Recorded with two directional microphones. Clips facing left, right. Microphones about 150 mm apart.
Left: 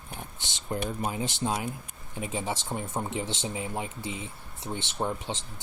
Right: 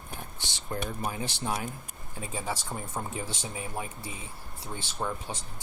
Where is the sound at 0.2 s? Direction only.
20° left (ahead or behind).